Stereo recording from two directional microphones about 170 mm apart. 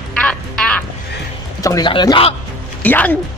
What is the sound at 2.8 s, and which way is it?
Speech, 10° left (ahead or behind).